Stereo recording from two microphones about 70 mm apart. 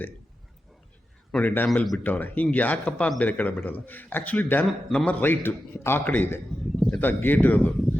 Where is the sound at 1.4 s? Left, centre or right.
Left.